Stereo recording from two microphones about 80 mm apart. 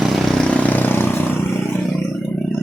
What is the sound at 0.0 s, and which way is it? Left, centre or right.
Vehicle, centre.